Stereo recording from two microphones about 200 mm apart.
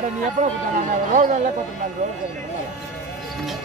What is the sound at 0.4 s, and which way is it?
Speech, 35° right (ahead or behind).